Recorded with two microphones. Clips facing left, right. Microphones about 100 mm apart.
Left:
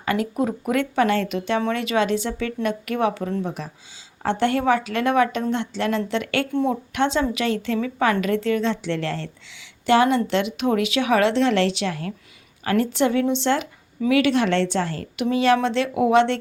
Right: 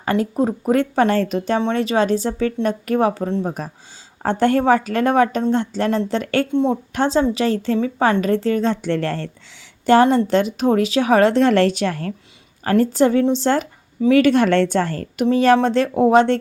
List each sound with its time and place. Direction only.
0.0 s a woman's voice: 35° right (ahead or behind)
6.5 s speech: 25° right (ahead or behind)
6.9 s a woman's voice: 35° right (ahead or behind)